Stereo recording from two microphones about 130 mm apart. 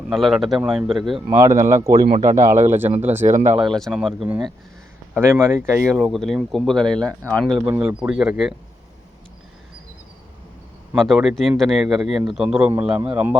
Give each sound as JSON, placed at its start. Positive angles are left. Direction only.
{"t": 0.1, "sound": "speech", "side_deg": 0}
{"t": 1.3, "sound": "speech", "side_deg": -20}
{"t": 2.1, "sound": "speech", "side_deg": -75}
{"t": 2.4, "sound": "speech", "side_deg": -20}
{"t": 3.2, "sound": "speech", "side_deg": -65}
{"t": 3.7, "sound": "speech", "side_deg": 5}
{"t": 5.1, "sound": "speech", "side_deg": -20}
{"t": 6.0, "sound": "speech", "side_deg": 0}
{"t": 7.7, "sound": "speech", "side_deg": -10}
{"t": 10.9, "sound": "speech", "side_deg": 0}